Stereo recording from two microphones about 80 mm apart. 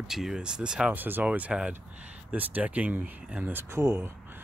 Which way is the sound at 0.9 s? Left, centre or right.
Right.